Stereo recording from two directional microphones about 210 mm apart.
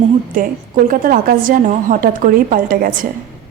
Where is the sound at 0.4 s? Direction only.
40° right (ahead or behind).